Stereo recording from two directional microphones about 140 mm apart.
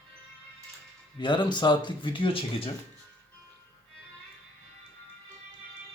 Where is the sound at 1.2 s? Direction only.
35° left (ahead or behind).